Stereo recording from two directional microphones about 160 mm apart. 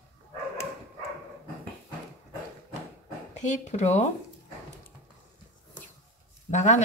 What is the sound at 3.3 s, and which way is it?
Speech, 45° left (ahead or behind).